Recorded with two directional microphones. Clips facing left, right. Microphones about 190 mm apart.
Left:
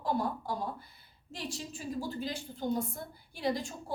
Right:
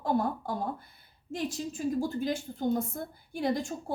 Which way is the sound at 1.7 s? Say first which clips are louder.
Right 7 dB; 50° right (ahead or behind).